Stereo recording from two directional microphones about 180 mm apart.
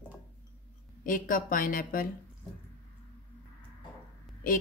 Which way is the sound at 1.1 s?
50° left (ahead or behind).